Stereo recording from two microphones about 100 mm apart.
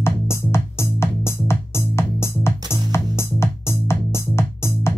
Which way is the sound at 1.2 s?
25° left (ahead or behind).